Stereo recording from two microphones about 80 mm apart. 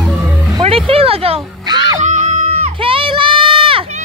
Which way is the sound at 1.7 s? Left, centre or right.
Right.